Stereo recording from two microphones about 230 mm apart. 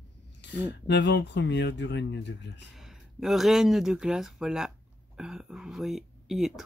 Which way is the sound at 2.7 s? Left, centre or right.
Centre.